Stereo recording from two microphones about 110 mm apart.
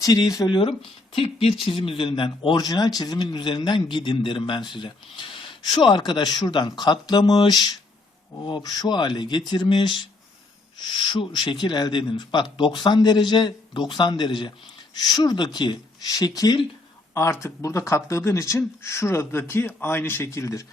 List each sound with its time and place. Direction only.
0.0 s speech: 35° left (ahead or behind)
0.6 s speech: 55° left (ahead or behind)
2.6 s a man's voice: 35° left (ahead or behind)